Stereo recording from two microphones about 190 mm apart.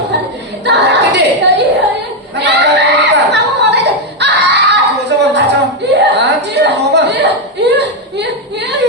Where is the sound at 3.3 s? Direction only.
65° right (ahead or behind).